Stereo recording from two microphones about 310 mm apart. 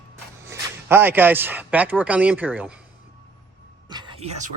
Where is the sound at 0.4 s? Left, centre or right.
Centre.